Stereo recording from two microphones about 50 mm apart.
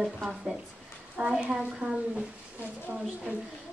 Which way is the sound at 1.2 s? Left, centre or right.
Right.